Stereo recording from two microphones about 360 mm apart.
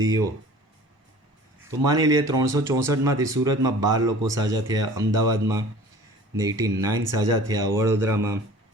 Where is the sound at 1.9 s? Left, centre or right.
Centre.